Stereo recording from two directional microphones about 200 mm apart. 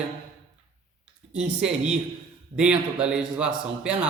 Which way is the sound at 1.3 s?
5° right (ahead or behind).